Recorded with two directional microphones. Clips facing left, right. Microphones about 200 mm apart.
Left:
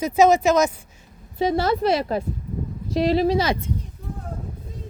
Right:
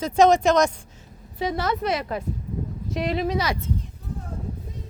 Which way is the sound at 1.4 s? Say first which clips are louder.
Left 5 dB; 30° left (ahead or behind).